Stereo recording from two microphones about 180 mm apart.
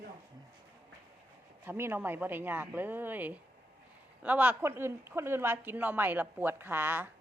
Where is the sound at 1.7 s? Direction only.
15° right (ahead or behind).